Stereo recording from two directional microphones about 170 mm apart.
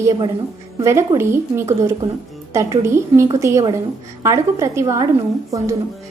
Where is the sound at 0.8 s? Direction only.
15° right (ahead or behind).